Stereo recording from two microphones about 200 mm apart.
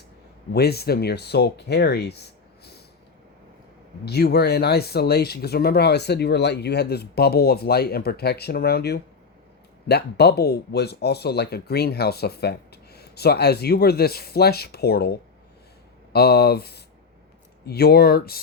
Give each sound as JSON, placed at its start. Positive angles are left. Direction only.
{"t": 0.5, "sound": "speech", "side_deg": 55}
{"t": 4.0, "sound": "speech", "side_deg": 55}